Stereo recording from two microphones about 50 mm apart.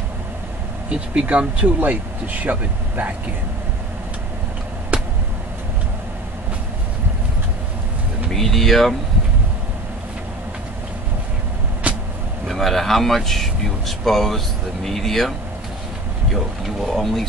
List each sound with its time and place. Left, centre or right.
0.8 s speech: right
4.9 s a sound: right
8.3 s speech: centre
11.9 s vehicle: right
12.4 s speech: centre
16.3 s speech: centre